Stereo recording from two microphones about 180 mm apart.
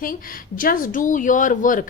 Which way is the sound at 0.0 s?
50° left (ahead or behind).